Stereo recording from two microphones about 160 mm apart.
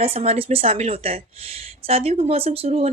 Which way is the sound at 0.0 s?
40° right (ahead or behind).